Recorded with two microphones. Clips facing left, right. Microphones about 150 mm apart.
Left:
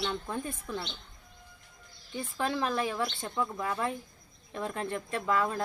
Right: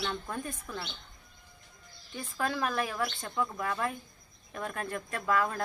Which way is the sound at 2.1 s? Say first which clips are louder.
Left 1 dB; 20° left (ahead or behind).